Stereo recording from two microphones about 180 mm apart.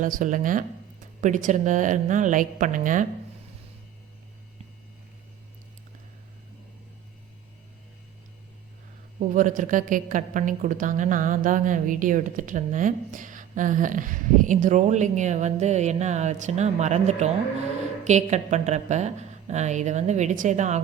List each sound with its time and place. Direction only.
0.0 s a woman's voice: 45° right (ahead or behind)
9.3 s a woman's voice: 45° right (ahead or behind)